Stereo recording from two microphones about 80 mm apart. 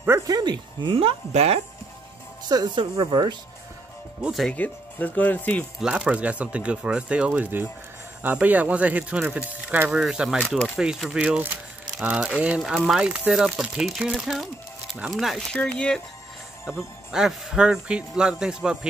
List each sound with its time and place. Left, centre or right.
0.3 s a sound: right
2.4 s speech: right
4.5 s speech: centre
5.8 s speech: centre
9.9 s speech: centre
11.1 s speech: centre
15.5 s speech: centre
16.7 s speech: centre